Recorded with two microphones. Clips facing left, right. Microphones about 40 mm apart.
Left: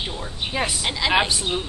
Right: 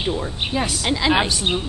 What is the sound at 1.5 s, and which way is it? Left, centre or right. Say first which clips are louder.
Speech: right 3 dB; right.